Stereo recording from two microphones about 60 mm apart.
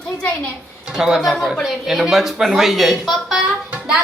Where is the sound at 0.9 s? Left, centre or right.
Centre.